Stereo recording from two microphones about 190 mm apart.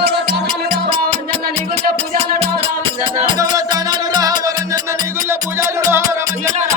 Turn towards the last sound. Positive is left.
turn(degrees=-15)  # may be behind; listen again after turning